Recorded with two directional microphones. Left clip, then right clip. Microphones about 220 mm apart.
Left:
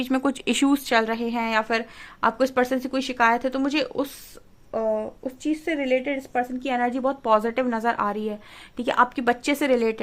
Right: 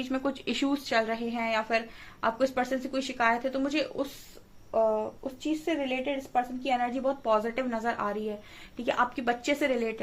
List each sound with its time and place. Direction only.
0.0 s a woman's voice: 45° left (ahead or behind)
5.5 s a woman's voice: 40° left (ahead or behind)